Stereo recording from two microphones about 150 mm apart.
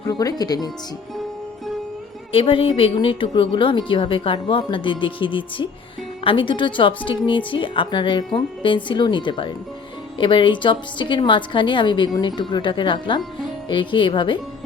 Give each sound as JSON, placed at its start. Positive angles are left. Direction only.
{"t": 0.1, "sound": "speech", "side_deg": 25}
{"t": 2.3, "sound": "a woman's voice", "side_deg": 35}